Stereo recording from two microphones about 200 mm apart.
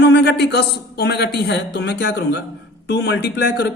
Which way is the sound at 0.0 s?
60° left (ahead or behind).